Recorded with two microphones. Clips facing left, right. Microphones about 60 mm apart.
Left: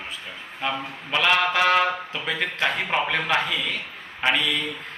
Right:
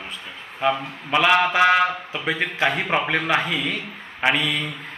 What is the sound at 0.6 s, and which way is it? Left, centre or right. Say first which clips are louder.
A man's voice: right 6 dB; centre.